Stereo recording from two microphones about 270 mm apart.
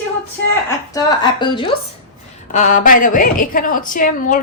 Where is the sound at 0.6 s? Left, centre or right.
Centre.